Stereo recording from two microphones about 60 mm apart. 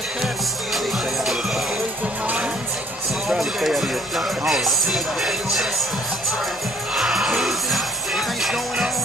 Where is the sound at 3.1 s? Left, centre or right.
Centre.